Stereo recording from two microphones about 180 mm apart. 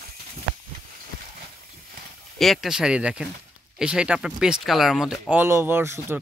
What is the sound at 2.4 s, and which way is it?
Speech, centre (ahead or behind).